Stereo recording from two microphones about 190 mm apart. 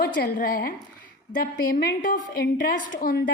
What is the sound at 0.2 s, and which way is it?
A woman's voice, 50° left (ahead or behind).